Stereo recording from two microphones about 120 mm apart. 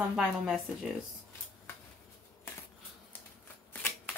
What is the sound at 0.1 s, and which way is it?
Speech, 5° right (ahead or behind).